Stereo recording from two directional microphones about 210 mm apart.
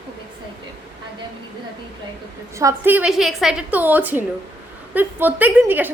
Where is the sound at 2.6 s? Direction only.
10° right (ahead or behind).